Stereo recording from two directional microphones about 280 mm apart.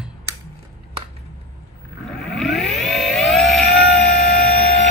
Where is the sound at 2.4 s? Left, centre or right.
Centre.